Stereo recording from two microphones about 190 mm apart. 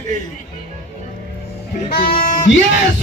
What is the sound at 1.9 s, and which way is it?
Speech, 50° left (ahead or behind).